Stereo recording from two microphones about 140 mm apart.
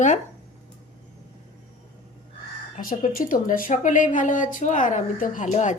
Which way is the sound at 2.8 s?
80° left.